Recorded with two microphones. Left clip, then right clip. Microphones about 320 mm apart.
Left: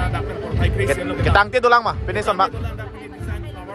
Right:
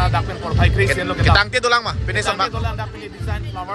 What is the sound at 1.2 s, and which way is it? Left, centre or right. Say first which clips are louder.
A man's voice: left 1 dB; centre.